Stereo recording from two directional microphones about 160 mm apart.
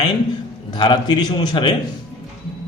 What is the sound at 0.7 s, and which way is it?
Speech, 25° left (ahead or behind).